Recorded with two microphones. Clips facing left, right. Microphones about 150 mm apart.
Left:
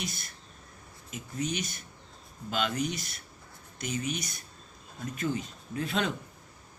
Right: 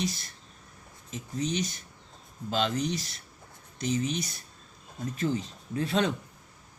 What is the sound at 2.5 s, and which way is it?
Speech, 35° right (ahead or behind).